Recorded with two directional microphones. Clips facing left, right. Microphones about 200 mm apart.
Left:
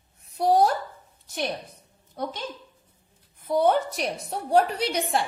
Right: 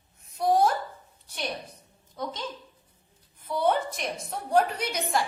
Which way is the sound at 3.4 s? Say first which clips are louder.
Left 4 dB; 45° left (ahead or behind).